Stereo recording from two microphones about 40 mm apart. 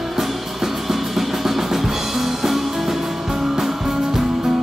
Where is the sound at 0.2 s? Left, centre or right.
Centre.